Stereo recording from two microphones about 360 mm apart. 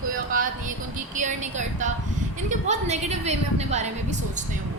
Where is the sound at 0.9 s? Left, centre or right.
Right.